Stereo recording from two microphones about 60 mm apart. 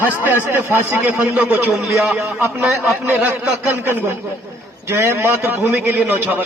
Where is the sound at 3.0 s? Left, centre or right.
Right.